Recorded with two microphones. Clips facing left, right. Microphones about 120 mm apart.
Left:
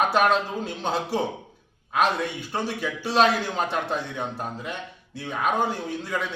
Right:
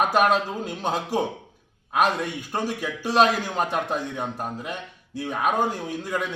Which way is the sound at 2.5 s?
10° right (ahead or behind).